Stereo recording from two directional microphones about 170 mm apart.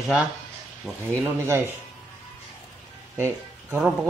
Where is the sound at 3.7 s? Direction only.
5° right (ahead or behind).